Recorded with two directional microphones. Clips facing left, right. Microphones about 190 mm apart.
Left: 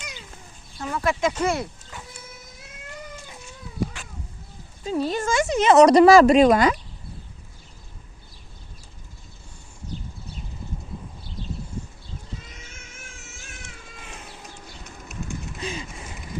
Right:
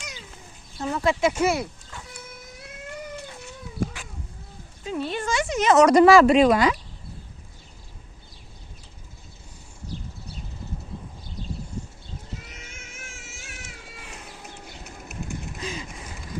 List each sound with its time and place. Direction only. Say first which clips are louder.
0.8 s speech: right 1 dB; 25° right (ahead or behind)
1.2 s speech: right 1 dB; 10° right (ahead or behind)
1.9 s cat: left 1 dB; 15° left (ahead or behind)
3.8 s cat: left 1 dB; 50° right (ahead or behind)
4.9 s speech: left 3 dB; 40° left (ahead or behind)
5.5 s speech: left 2 dB; 30° left (ahead or behind)
13.5 s cat: even; 10° right (ahead or behind)